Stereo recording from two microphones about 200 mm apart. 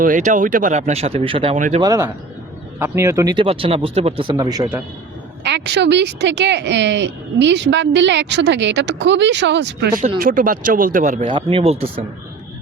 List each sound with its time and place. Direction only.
0.3 s speech: 40° right (ahead or behind)
1.5 s speech: 40° right (ahead or behind)
1.8 s speech: 15° right (ahead or behind)
5.4 s speech: 60° right (ahead or behind)
10.2 s speech: 45° right (ahead or behind)
11.3 s speech: 25° right (ahead or behind)